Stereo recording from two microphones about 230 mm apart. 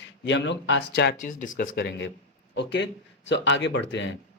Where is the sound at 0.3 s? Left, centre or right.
Left.